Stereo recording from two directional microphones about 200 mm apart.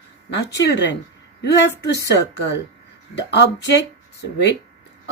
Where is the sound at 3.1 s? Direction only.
60° left (ahead or behind).